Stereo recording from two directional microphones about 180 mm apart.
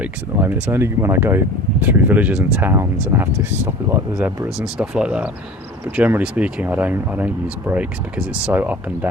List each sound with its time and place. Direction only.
0.0 s speech: 10° right (ahead or behind)
4.4 s speech: 5° right (ahead or behind)